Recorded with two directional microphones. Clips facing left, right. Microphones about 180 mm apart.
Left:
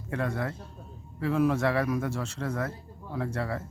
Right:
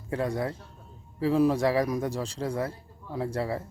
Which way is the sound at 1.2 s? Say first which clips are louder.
Right 2 dB; 30° right (ahead or behind).